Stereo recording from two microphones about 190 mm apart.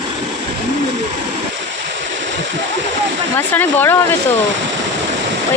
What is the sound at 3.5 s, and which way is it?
Speech, 10° left (ahead or behind).